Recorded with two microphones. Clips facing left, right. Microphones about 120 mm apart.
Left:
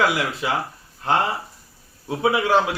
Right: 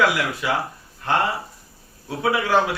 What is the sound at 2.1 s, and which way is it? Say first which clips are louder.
Speech: left 2 dB; 25° left (ahead or behind).